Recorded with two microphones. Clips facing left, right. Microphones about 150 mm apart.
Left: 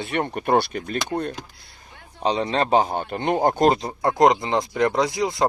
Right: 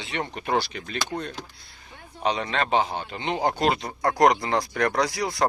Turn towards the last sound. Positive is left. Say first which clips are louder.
# left 3 dB
turn(degrees=20)  # may be behind; listen again after turning